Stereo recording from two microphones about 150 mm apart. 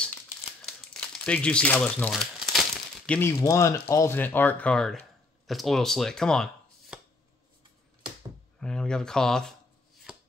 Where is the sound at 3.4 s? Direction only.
20° left (ahead or behind); by 7.0 s centre (ahead or behind).